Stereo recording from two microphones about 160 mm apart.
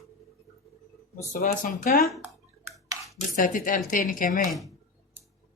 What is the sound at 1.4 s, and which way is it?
Speech, 60° left (ahead or behind).